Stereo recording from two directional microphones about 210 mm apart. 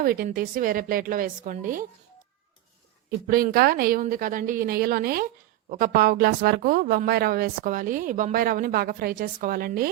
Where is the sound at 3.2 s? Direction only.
45° right (ahead or behind).